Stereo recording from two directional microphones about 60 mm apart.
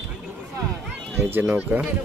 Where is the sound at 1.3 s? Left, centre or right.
Right.